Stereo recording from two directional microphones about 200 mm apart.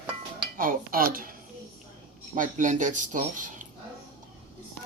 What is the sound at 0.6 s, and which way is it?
Speech, 45° right (ahead or behind).